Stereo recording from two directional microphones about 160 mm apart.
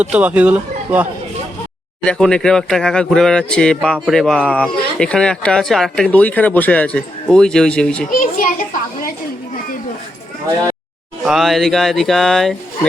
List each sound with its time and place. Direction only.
0.0 s speech: 10° right (ahead or behind)
2.0 s speech: 5° left (ahead or behind)
8.2 s a child's voice: 55° left (ahead or behind)
11.2 s speech: centre (ahead or behind)